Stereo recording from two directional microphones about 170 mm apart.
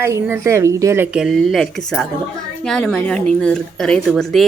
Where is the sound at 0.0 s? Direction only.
15° right (ahead or behind).